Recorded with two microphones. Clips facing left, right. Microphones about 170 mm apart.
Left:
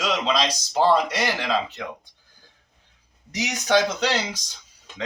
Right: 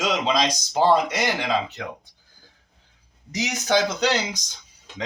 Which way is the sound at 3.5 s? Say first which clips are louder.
Left 1 dB; 10° right (ahead or behind).